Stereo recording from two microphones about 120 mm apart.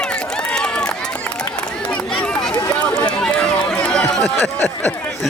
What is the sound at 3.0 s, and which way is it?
Run, 10° left (ahead or behind).